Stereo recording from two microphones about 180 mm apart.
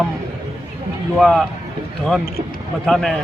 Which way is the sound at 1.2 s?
Centre (ahead or behind).